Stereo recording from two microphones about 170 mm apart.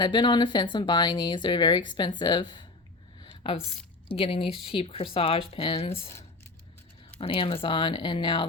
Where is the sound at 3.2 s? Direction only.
30° left (ahead or behind).